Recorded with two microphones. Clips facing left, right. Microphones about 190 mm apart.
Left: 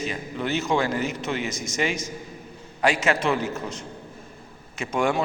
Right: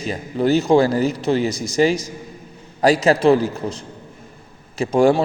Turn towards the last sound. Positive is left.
turn(degrees=-35)  # may be behind; listen again after turning